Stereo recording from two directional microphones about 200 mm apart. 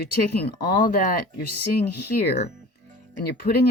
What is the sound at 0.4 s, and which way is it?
Speech, 50° left (ahead or behind).